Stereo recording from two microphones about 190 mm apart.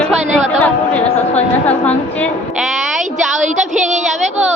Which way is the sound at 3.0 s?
40° right (ahead or behind).